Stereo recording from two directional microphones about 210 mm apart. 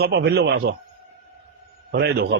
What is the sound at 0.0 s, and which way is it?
Speech, 50° right (ahead or behind).